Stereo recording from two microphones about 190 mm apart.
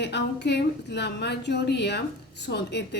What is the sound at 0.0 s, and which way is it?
A woman's voice, 65° left (ahead or behind).